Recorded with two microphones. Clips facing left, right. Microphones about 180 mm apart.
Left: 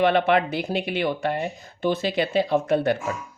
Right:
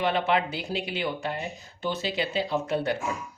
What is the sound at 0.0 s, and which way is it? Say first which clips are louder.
Speech: left 6 dB; 60° left (ahead or behind).